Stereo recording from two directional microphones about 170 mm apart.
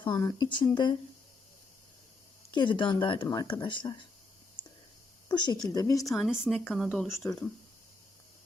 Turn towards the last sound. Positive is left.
turn(degrees=15)  # may be behind; listen again after turning